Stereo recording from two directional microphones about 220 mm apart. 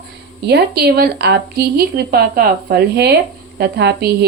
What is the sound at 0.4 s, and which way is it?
A woman's voice, 50° right (ahead or behind).